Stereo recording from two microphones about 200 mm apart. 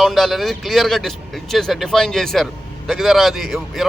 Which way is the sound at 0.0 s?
Centre (ahead or behind).